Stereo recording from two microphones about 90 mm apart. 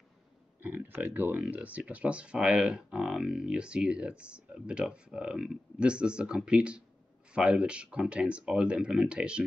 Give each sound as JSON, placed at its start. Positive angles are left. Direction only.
{"t": 0.6, "sound": "speech", "side_deg": -20}